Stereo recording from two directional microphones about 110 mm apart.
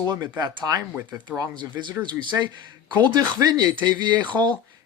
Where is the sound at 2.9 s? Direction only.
40° right (ahead or behind).